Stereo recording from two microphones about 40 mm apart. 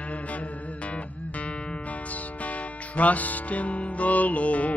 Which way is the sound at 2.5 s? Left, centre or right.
Left.